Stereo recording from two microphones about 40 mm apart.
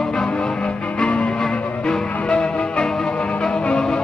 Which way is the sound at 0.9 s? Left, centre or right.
Left.